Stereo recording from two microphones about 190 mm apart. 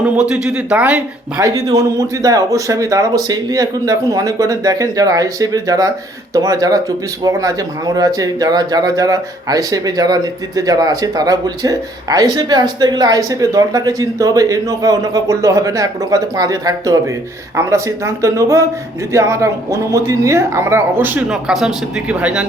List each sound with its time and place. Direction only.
0.0 s speech: 5° right (ahead or behind)